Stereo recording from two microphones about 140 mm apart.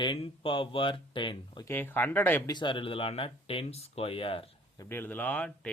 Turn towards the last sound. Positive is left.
turn(degrees=10)  # may be behind; listen again after turning